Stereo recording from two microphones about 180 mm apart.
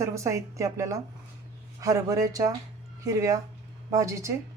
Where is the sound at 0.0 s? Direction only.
15° right (ahead or behind).